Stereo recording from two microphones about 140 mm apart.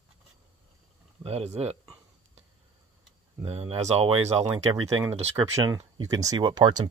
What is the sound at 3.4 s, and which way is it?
Speech, 45° right (ahead or behind).